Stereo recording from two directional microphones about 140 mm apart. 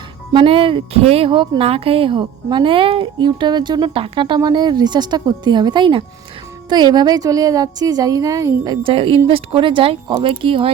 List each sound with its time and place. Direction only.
0.3 s a woman's voice: 40° right (ahead or behind)